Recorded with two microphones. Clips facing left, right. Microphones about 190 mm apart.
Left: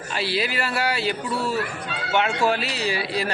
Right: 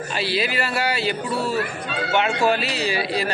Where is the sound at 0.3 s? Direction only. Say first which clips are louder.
Right 1 dB; 90° right.